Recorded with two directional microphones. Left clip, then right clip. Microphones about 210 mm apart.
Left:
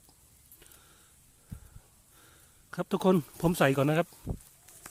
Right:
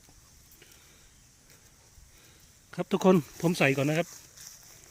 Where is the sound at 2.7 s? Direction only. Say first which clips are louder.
Right 3 dB; 15° left (ahead or behind).